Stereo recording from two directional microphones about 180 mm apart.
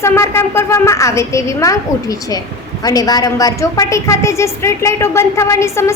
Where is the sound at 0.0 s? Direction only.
15° left (ahead or behind).